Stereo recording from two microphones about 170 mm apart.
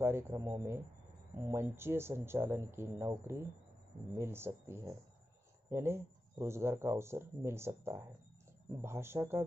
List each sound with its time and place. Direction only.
0.0 s speech: 15° right (ahead or behind)